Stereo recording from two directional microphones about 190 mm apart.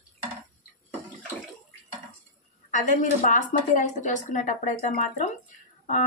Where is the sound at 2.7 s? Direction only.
45° left (ahead or behind).